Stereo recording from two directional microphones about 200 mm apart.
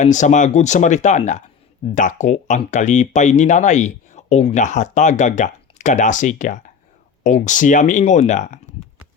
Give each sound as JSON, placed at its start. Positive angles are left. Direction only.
{"t": 0.0, "sound": "speech", "side_deg": 35}